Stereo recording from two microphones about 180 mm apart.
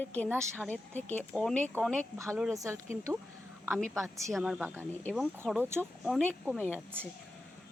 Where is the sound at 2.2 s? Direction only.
15° right (ahead or behind).